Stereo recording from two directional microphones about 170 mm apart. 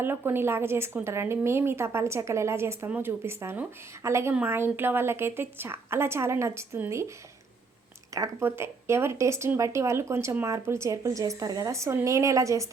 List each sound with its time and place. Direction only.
0.0 s a woman's voice: 10° right (ahead or behind)
8.1 s a woman's voice: 15° right (ahead or behind)